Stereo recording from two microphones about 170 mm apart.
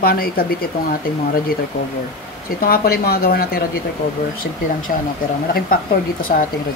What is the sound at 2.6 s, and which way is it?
Speech, 60° left (ahead or behind).